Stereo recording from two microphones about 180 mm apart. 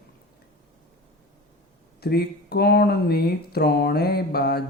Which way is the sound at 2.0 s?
60° left (ahead or behind).